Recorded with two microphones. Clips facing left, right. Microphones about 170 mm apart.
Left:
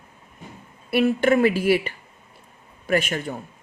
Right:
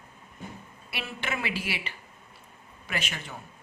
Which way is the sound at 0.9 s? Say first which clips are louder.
Left 17 dB; 50° left (ahead or behind).